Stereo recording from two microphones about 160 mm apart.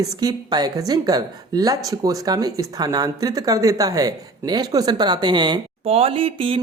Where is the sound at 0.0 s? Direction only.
25° right (ahead or behind).